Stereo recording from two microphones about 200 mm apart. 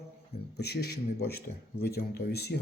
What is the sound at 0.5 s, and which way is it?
Speech, 55° left (ahead or behind).